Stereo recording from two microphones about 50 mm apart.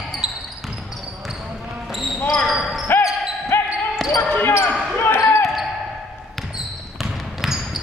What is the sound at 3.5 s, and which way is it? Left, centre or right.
Basketball bounce, left.